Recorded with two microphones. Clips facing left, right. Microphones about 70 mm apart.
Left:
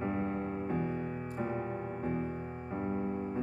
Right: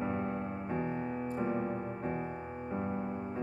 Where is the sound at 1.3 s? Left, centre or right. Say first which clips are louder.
Right 2 dB; centre.